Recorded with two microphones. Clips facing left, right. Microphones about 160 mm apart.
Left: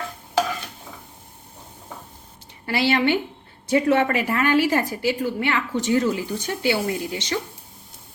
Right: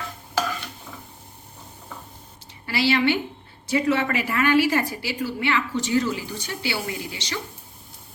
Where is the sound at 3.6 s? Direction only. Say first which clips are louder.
Left 3 dB; 50° left (ahead or behind).